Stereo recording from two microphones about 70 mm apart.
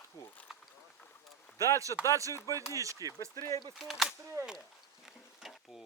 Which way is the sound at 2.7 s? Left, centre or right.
Right.